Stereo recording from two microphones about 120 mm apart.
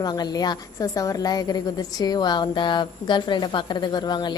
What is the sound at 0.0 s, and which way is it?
A woman's voice, 35° left (ahead or behind).